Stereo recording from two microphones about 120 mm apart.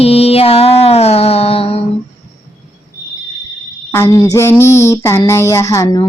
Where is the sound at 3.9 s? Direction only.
25° left (ahead or behind).